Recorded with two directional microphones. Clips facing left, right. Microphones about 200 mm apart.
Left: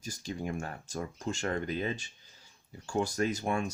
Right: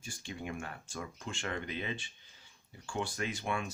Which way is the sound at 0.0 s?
40° left (ahead or behind).